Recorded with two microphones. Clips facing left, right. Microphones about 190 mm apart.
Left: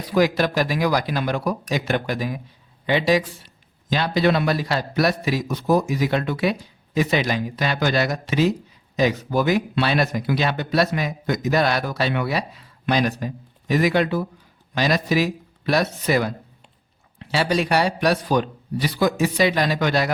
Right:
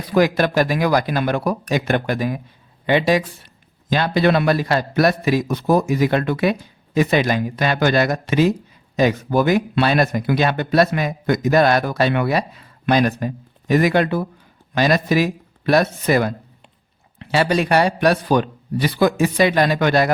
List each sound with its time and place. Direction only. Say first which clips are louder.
0.1 s a man's voice: right 3 dB; 55° right (ahead or behind)